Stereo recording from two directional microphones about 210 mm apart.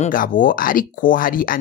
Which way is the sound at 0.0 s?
40° left (ahead or behind).